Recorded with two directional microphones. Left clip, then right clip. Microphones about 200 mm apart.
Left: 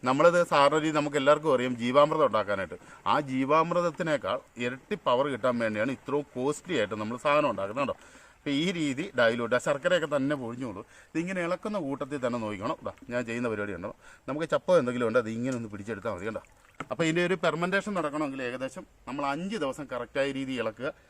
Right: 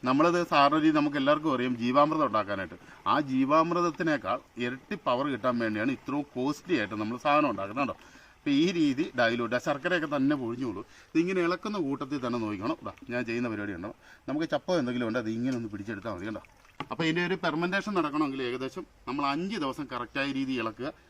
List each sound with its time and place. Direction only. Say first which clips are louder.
0.0 s a man's voice: left 3 dB; 45° left (ahead or behind)
16.9 s a man's voice: left 2 dB; 55° left (ahead or behind); by 20.9 s 35° left (ahead or behind)